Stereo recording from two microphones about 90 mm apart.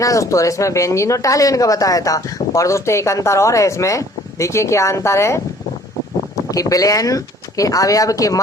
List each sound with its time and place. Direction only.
0.0 s speech: 35° left (ahead or behind)
6.5 s speech: 40° left (ahead or behind)